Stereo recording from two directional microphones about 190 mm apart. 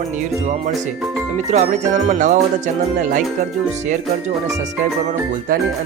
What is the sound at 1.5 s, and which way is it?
Speech, 40° right (ahead or behind).